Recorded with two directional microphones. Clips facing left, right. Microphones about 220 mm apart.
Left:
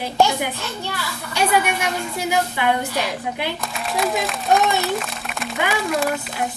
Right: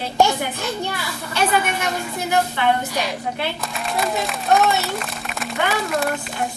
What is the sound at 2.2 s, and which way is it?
Speech, 10° left (ahead or behind).